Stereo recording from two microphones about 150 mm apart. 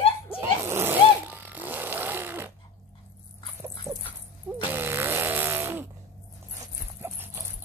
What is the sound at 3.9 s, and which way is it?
Dog, 20° right (ahead or behind).